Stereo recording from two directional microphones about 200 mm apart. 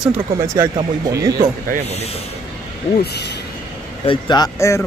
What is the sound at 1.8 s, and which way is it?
Speech, 30° left (ahead or behind).